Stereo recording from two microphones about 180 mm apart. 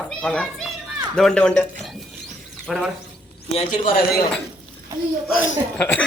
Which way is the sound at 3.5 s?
35° left (ahead or behind).